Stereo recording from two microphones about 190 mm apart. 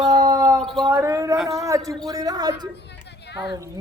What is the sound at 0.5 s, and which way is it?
Speech, centre (ahead or behind).